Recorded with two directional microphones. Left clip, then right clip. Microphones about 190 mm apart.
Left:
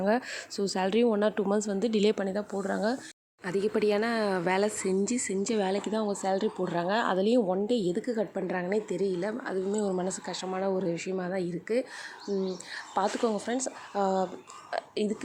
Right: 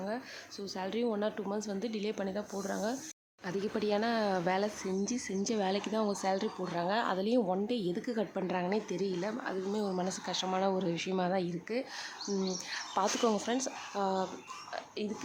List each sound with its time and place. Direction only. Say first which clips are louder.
0.0 s a woman's voice: left 11 dB; 45° left (ahead or behind); by 3.0 s 30° left (ahead or behind)
3.4 s speech: left 7 dB; 15° left (ahead or behind)
12.7 s speech: left 3 dB; 10° left (ahead or behind)
14.7 s whispering: left 9 dB; 35° left (ahead or behind)